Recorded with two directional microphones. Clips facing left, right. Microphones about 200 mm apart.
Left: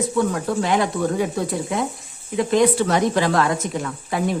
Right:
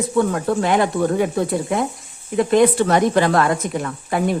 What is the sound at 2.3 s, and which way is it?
Speech, 55° right (ahead or behind).